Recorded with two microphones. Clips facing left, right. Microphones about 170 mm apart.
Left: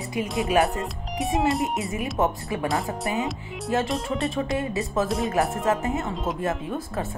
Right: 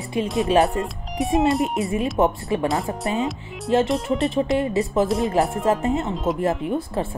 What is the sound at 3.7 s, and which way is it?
Speech, 25° right (ahead or behind).